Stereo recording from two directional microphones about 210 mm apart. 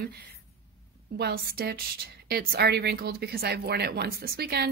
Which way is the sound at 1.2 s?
50° right (ahead or behind).